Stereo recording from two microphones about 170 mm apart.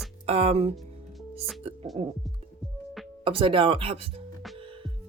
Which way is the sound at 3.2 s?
30° right (ahead or behind).